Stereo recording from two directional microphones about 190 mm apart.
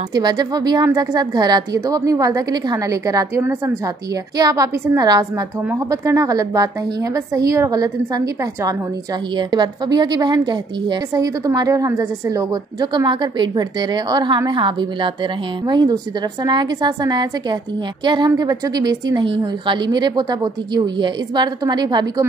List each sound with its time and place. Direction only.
0.1 s a woman's voice: 20° right (ahead or behind)
9.4 s a woman's voice: 20° right (ahead or behind)